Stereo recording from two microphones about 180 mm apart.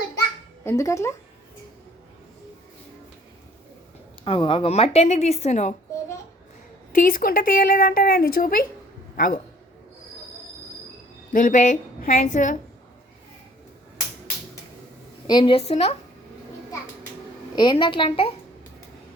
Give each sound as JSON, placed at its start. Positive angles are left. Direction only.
{"t": 0.6, "sound": "speech", "side_deg": 15}
{"t": 4.2, "sound": "a woman's voice", "side_deg": 30}
{"t": 6.9, "sound": "a woman's voice", "side_deg": 50}
{"t": 11.3, "sound": "a woman's voice", "side_deg": 50}
{"t": 15.3, "sound": "a woman's voice", "side_deg": 25}
{"t": 17.5, "sound": "a woman's voice", "side_deg": 25}